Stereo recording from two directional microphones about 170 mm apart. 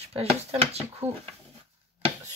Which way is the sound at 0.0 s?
35° right (ahead or behind).